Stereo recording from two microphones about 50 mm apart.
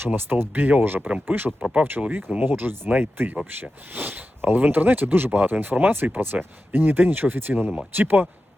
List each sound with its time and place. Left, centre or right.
0.0 s speech: right
2.0 s speech: centre
2.4 s speech: right